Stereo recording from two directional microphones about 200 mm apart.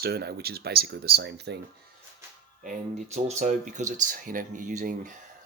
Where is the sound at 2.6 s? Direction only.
40° right (ahead or behind).